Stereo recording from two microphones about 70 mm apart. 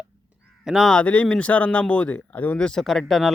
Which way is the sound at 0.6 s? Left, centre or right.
Centre.